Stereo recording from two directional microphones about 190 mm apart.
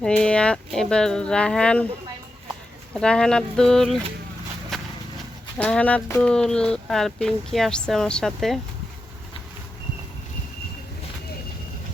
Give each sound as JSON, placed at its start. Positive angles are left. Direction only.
{"t": 0.0, "sound": "speech", "side_deg": 5}
{"t": 2.9, "sound": "speech", "side_deg": 5}
{"t": 4.7, "sound": "horse", "side_deg": 0}
{"t": 5.5, "sound": "speech", "side_deg": 5}